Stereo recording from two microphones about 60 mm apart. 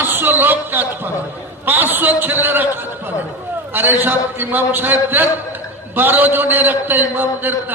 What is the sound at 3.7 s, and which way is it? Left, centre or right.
A man's voice, right.